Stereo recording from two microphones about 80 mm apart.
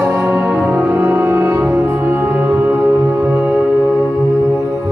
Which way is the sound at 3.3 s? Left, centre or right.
Centre.